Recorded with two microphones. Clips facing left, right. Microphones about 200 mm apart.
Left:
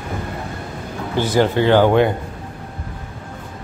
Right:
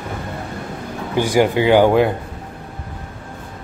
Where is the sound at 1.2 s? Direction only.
10° right (ahead or behind).